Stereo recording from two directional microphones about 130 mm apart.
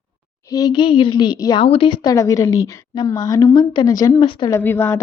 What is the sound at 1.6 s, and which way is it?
Speech, 45° left (ahead or behind).